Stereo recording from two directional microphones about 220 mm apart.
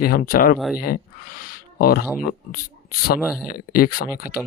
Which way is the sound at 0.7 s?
40° left (ahead or behind).